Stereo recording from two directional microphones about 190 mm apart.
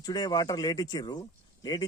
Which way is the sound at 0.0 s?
20° left (ahead or behind).